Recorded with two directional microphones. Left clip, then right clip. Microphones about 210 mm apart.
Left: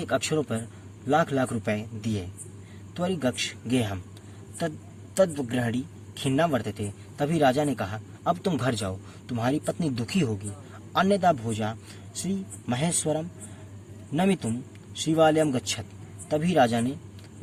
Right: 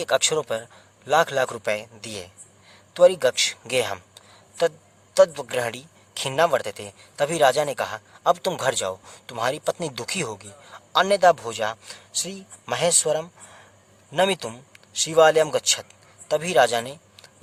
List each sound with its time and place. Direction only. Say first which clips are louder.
0.0 s a man's voice: right 5 dB; 35° right (ahead or behind)
5.1 s a man's voice: right 6 dB; 35° right (ahead or behind)